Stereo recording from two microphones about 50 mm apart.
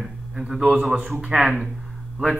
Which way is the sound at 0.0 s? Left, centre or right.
Centre.